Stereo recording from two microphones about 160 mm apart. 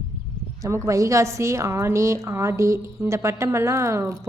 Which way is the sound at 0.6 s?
20° right (ahead or behind).